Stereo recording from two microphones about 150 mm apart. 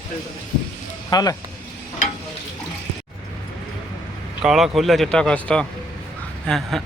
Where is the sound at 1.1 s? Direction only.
25° left (ahead or behind).